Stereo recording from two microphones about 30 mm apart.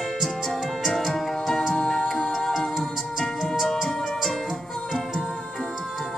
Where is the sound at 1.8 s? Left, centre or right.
Left.